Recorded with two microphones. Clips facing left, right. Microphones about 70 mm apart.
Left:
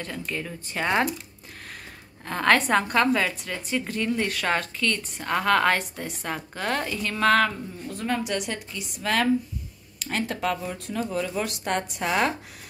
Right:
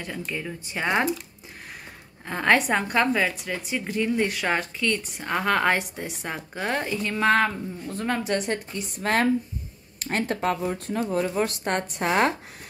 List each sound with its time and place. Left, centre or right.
0.0 s a woman's voice: centre
2.2 s a woman's voice: centre
7.9 s speech: right